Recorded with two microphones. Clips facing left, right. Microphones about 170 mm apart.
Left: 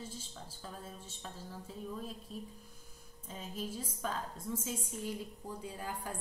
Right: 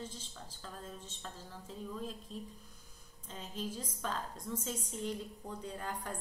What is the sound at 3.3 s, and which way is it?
Speech, 10° left (ahead or behind).